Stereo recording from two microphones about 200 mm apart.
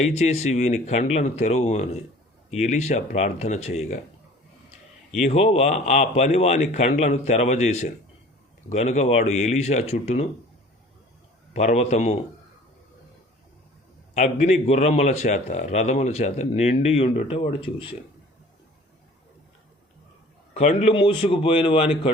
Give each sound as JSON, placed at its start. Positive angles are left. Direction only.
{"t": 0.0, "sound": "a man's voice", "side_deg": 35}
{"t": 5.2, "sound": "a man's voice", "side_deg": 30}
{"t": 11.5, "sound": "a man's voice", "side_deg": 35}
{"t": 14.1, "sound": "a man's voice", "side_deg": 35}
{"t": 20.5, "sound": "a man's voice", "side_deg": 35}